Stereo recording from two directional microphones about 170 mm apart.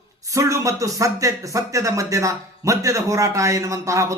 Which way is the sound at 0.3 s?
20° right (ahead or behind).